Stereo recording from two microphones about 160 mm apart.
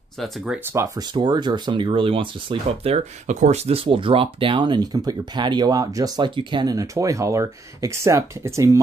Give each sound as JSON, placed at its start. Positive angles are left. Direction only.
{"t": 0.7, "sound": "speech", "side_deg": -25}
{"t": 2.8, "sound": "speech", "side_deg": -45}